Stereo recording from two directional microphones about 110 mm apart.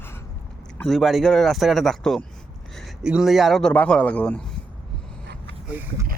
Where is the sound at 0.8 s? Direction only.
Centre (ahead or behind).